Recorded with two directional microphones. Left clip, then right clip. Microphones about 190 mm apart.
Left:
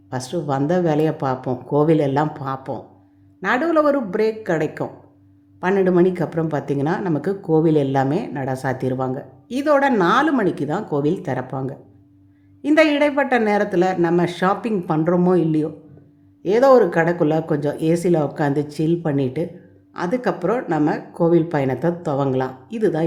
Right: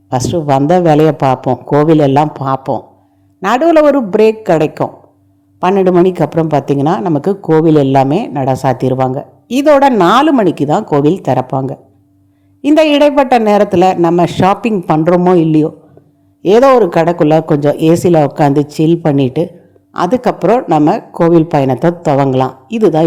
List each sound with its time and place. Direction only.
0.1 s a woman's voice: 35° right (ahead or behind)